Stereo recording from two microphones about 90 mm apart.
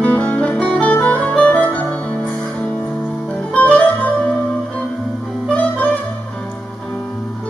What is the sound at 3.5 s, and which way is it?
Music, 15° left (ahead or behind).